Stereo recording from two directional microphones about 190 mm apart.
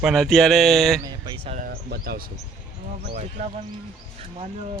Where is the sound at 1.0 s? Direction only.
20° right (ahead or behind).